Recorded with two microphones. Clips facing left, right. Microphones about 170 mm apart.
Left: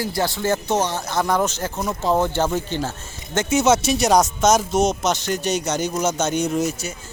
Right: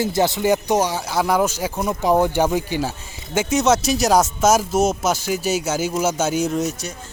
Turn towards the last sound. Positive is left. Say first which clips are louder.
# even
turn(degrees=0)  # may be behind; listen again after turning